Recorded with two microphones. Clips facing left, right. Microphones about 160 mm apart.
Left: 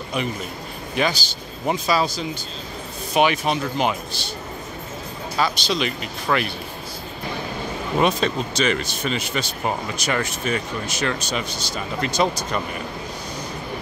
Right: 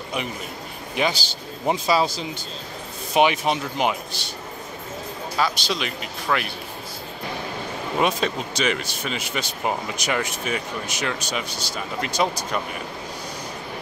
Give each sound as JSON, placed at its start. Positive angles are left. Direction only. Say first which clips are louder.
{"t": 0.9, "sound": "speech", "louder": "left 1 dB", "side_deg": -25}
{"t": 5.4, "sound": "speech", "louder": "left 2 dB", "side_deg": -5}
{"t": 8.0, "sound": "speech", "louder": "left 2 dB", "side_deg": -10}